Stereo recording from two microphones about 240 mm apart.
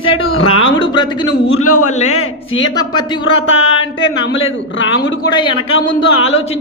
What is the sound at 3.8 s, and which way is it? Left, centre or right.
Speech, left.